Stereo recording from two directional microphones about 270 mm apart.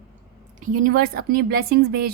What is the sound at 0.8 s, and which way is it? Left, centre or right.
A woman's voice, right.